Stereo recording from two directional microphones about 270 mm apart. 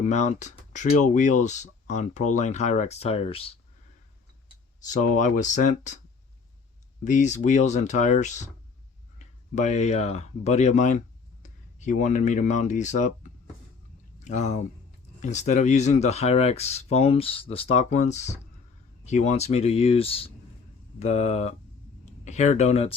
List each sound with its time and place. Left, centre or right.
0.0 s speech: left
4.4 s a sound: left
5.1 s speech: left
7.0 s speech: left